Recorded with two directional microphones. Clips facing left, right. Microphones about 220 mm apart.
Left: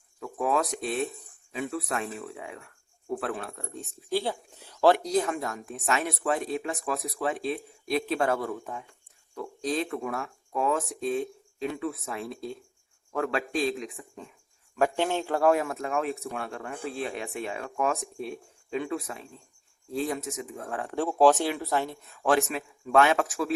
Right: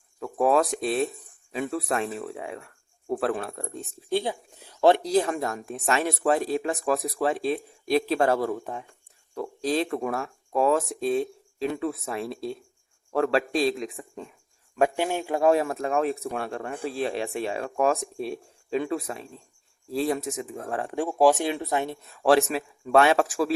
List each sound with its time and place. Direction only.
0.2 s speech: 35° right (ahead or behind)
3.2 s speech: 35° right (ahead or behind)
4.1 s speech: 15° right (ahead or behind); by 13.9 s 35° right (ahead or behind)
14.9 s speech: 10° right (ahead or behind)
15.4 s speech: 30° right (ahead or behind)
20.8 s speech: 15° right (ahead or behind); by 23.6 s 35° right (ahead or behind)